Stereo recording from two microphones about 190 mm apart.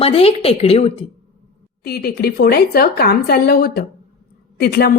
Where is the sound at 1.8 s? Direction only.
55° left (ahead or behind).